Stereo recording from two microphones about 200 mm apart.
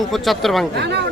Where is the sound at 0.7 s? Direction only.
55° right (ahead or behind).